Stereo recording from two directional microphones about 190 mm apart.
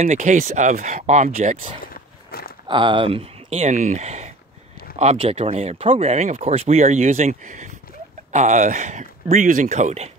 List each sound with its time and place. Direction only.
0.0 s speech: 40° right (ahead or behind)
2.3 s speech: 50° left (ahead or behind)
2.7 s speech: 25° right (ahead or behind)